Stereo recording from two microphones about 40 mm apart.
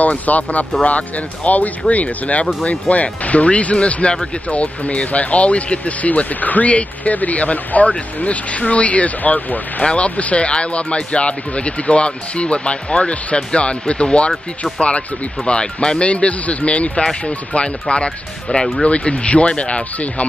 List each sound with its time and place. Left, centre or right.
0.0 s speech: left